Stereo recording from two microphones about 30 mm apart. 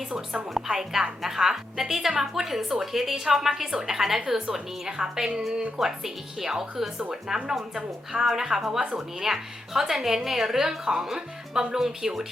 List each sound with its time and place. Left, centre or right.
0.7 s a woman's voice: centre
5.8 s speech: centre
6.4 s a woman's voice: centre